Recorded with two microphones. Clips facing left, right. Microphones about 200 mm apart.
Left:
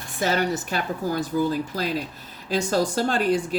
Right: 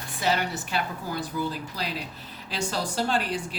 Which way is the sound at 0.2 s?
45° left (ahead or behind).